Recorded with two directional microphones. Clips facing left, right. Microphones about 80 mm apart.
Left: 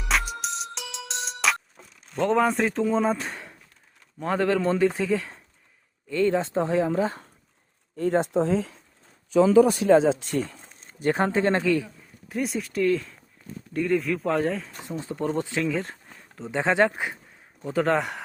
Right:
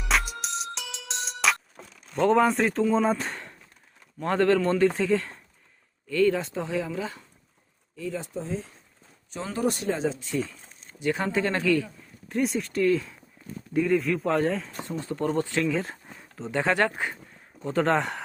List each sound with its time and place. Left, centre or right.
0.1 s music: centre
2.1 s a man's voice: centre
6.1 s speech: left
7.9 s speech: left
10.1 s speech: left
11.0 s speech: left
12.3 s speech: centre
14.8 s a man's voice: centre
15.6 s a sound: centre
16.5 s a man's voice: centre
17.6 s speech: centre